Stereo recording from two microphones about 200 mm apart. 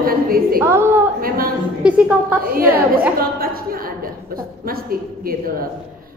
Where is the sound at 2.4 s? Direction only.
45° right (ahead or behind).